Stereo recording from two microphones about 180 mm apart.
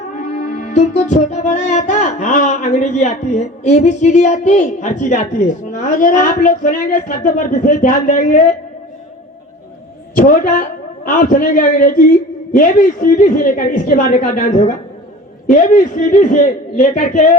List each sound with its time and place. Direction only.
0.1 s music: 45° left (ahead or behind)
10.2 s a man's voice: 50° left (ahead or behind)
12.5 s music: 50° left (ahead or behind)